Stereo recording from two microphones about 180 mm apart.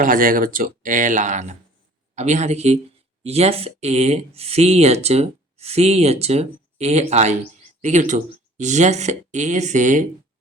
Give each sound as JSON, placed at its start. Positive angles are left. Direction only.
{"t": 0.0, "sound": "speech", "side_deg": -50}